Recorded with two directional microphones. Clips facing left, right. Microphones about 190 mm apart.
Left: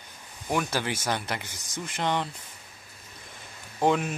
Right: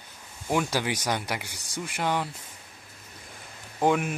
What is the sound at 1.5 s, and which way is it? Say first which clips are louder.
Speech: right 1 dB; 35° right (ahead or behind).